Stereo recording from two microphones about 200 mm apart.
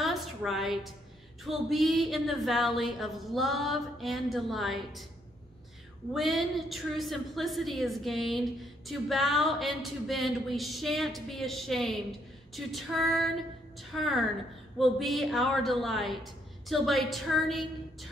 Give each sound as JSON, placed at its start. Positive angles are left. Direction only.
{"t": 0.0, "sound": "a sound", "side_deg": 0}
{"t": 1.4, "sound": "a woman's voice", "side_deg": 0}
{"t": 6.1, "sound": "a woman's voice", "side_deg": 0}